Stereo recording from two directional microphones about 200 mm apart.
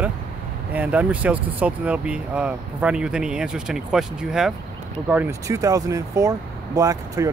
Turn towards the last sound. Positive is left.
turn(degrees=-15)  # may be behind; listen again after turning